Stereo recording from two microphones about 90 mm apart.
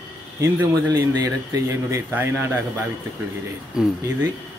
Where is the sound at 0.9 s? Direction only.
35° right (ahead or behind).